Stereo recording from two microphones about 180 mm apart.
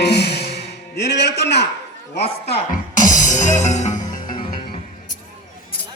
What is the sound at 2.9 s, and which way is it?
Music, 45° left (ahead or behind).